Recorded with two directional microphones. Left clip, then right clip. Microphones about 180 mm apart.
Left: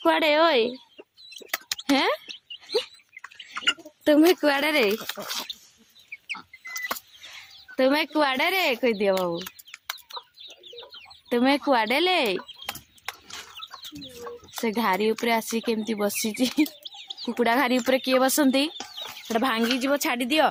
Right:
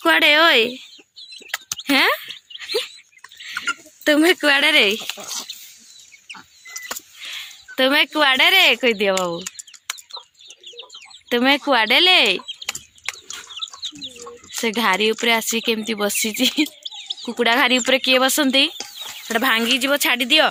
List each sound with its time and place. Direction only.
0.0 s speech: centre (ahead or behind)
1.9 s a sound: centre (ahead or behind)
4.0 s speech: 5° left (ahead or behind)
5.5 s a sound: 55° left (ahead or behind)
6.3 s chicken: 55° left (ahead or behind)
7.8 s speech: centre (ahead or behind)
11.3 s speech: centre (ahead or behind)
12.5 s chicken: 45° left (ahead or behind)
14.6 s speech: centre (ahead or behind)